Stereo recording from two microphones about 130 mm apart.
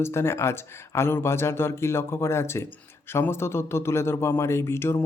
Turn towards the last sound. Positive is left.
turn(degrees=20)  # may be behind; listen again after turning